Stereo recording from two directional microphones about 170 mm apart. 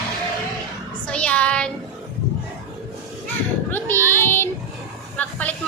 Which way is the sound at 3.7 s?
15° left (ahead or behind).